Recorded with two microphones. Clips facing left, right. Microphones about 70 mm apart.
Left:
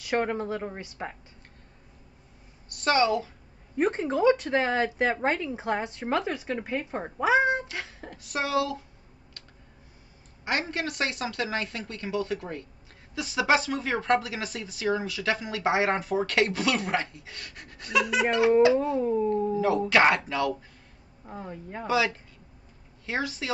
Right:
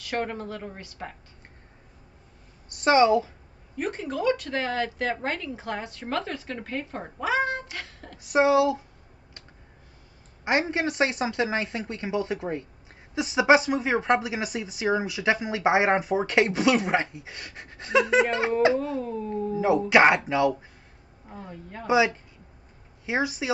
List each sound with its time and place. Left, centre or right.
0.0 s speech: centre
2.7 s a woman's voice: right
3.7 s speech: left
7.7 s beatboxing: centre
8.2 s speech: right
10.7 s speech: right
18.8 s speech: left
19.5 s speech: centre
21.3 s speech: centre
21.8 s a woman's voice: centre